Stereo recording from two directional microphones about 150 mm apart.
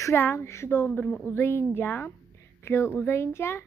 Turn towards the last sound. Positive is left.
turn(degrees=15)  # may be behind; listen again after turning